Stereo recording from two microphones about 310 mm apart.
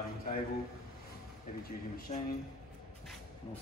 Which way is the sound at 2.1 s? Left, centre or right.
Left.